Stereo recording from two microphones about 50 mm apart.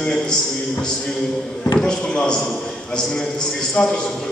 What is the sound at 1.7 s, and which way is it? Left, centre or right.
Speech, centre.